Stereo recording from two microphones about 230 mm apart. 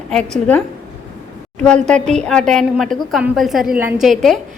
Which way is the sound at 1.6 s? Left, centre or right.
Centre.